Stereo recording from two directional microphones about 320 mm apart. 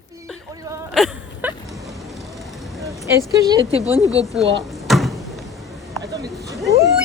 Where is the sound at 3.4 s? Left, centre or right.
Centre.